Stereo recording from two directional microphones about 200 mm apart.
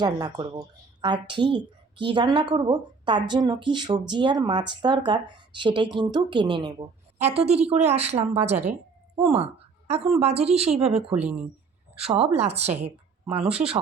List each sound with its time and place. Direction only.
0.0 s speech: 20° right (ahead or behind)
7.2 s a woman's voice: 30° right (ahead or behind)
11.1 s speech: 5° right (ahead or behind)
11.9 s a woman's voice: 30° right (ahead or behind)
13.4 s speech: 5° right (ahead or behind)